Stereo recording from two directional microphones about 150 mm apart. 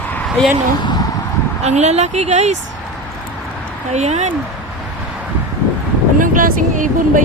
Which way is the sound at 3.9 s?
50° right (ahead or behind).